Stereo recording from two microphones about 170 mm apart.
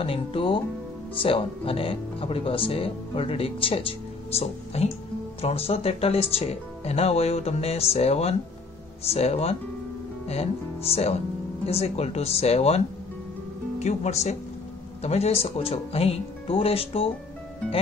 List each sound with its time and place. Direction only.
0.0 s speech: 30° left (ahead or behind)